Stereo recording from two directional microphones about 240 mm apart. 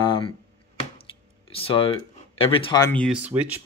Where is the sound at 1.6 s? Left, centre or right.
Left.